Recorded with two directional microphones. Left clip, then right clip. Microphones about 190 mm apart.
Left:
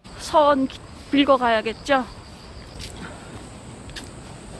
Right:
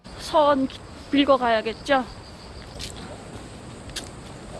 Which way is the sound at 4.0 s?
45° right (ahead or behind).